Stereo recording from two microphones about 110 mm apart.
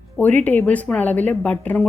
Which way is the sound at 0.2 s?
15° left (ahead or behind).